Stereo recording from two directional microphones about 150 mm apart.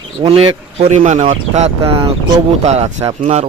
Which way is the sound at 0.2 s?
40° right (ahead or behind).